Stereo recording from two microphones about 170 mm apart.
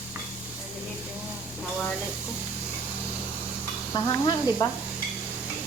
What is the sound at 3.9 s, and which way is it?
Speech, 20° left (ahead or behind).